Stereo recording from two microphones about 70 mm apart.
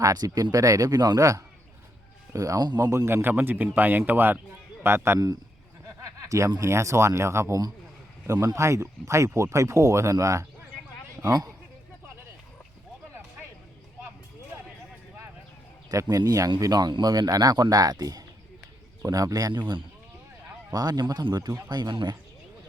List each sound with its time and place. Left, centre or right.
0.0 s speech: right
2.6 s speech: right
3.1 s a man's voice: right
6.0 s a sound: right
6.6 s speech: right
11.2 s a man's voice: right
15.9 s speech: right
20.7 s speech: right